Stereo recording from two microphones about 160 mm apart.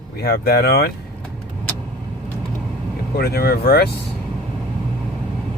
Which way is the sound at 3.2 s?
75° left (ahead or behind).